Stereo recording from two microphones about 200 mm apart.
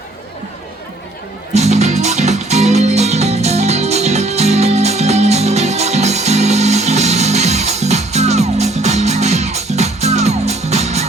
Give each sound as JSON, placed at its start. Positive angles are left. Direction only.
{"t": 1.5, "sound": "music", "side_deg": -35}